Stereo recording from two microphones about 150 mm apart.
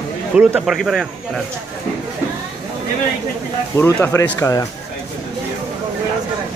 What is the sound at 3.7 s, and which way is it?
Speech, 20° left (ahead or behind).